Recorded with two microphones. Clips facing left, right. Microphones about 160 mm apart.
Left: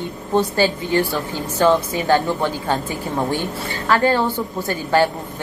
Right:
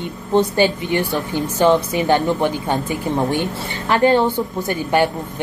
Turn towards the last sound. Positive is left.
turn(degrees=-20)  # may be behind; listen again after turning